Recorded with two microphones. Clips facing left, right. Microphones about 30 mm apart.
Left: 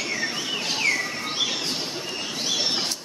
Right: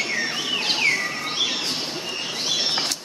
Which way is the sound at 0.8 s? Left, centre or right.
Right.